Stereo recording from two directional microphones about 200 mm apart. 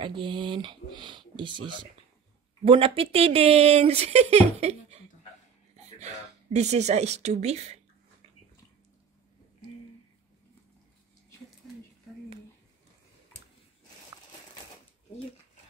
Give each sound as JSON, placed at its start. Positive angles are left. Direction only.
{"t": 0.0, "sound": "speech", "side_deg": -25}